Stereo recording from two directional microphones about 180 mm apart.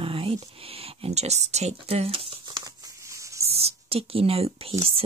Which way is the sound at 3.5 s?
35° right (ahead or behind).